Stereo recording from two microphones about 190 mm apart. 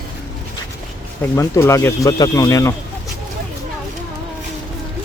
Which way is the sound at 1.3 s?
15° left (ahead or behind).